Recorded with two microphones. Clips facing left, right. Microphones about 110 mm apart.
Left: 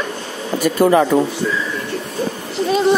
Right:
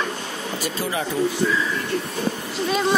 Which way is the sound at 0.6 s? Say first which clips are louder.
Left 15 dB; 65° left (ahead or behind).